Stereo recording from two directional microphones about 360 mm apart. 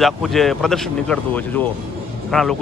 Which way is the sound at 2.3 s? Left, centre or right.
Centre.